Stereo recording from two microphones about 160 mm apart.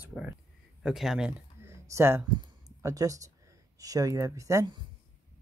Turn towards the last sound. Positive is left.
turn(degrees=-25)  # may be behind; listen again after turning